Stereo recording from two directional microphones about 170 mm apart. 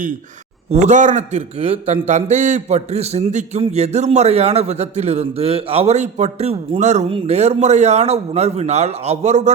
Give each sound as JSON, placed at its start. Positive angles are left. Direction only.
{"t": 0.7, "sound": "a man's voice", "side_deg": -40}